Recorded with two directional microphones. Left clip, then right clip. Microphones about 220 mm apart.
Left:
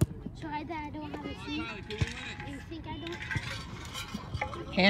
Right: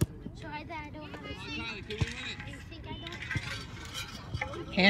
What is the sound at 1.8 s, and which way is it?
Vehicle, 40° left (ahead or behind).